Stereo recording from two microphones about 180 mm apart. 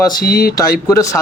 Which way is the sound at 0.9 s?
20° left (ahead or behind).